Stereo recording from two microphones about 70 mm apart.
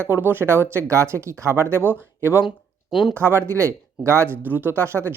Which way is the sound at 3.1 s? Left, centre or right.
Right.